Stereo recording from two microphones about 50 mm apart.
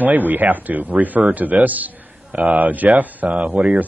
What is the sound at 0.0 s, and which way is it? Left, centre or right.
Speech, right.